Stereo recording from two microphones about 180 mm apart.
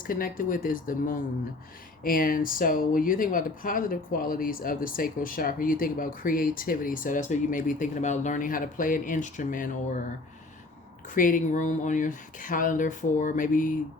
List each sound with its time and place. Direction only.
0.0 s speech: 50° left (ahead or behind)
11.1 s speech: 50° left (ahead or behind)